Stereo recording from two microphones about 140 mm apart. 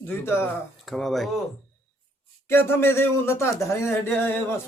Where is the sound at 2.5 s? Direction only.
15° left (ahead or behind).